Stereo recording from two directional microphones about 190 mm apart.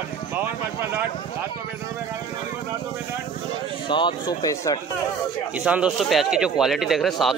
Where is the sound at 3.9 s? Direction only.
25° left (ahead or behind).